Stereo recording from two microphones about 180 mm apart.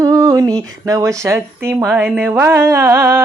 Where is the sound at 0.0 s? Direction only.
20° right (ahead or behind).